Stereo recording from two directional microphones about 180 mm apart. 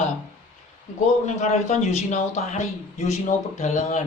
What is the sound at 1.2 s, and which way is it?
A man's voice, 40° left (ahead or behind).